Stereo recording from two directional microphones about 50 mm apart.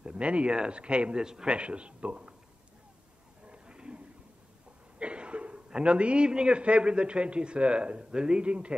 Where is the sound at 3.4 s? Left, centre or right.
Centre.